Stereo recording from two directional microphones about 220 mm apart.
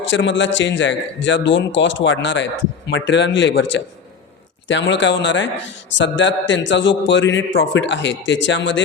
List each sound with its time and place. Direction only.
0.1 s a man's voice: 55° left (ahead or behind)